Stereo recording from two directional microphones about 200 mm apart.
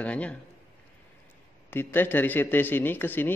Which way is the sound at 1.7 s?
10° left (ahead or behind).